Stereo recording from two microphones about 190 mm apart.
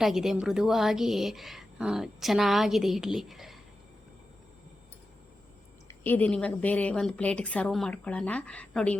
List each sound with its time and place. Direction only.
0.0 s a woman's voice: centre (ahead or behind)
5.9 s a woman's voice: 10° left (ahead or behind)